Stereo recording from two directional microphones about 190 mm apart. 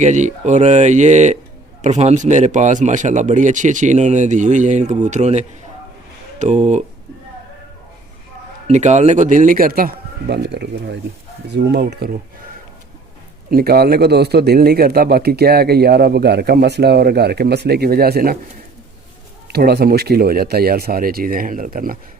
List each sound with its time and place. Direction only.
0.0 s speech: 40° right (ahead or behind)
8.6 s a man's voice: 35° right (ahead or behind); by 12.1 s 60° right (ahead or behind)
13.5 s a man's voice: 50° right (ahead or behind)
19.5 s speech: 55° right (ahead or behind)